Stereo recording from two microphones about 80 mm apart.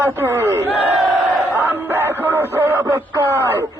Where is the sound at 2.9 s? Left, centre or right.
Right.